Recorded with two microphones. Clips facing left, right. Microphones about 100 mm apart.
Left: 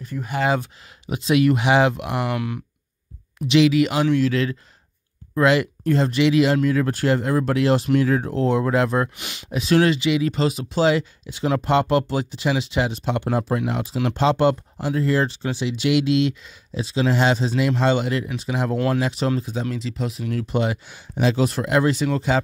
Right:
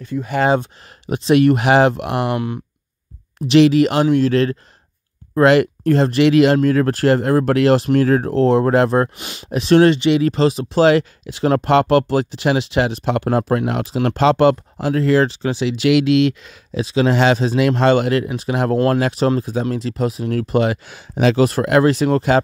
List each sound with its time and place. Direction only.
1.1 s speech: 45° right (ahead or behind)
2.3 s speech: 30° right (ahead or behind)
3.5 s speech: 45° right (ahead or behind); by 7.9 s 70° right (ahead or behind)
7.9 s speech: 45° right (ahead or behind)
9.5 s speech: 55° right (ahead or behind)
19.1 s speech: 45° right (ahead or behind)
20.3 s speech: 65° right (ahead or behind)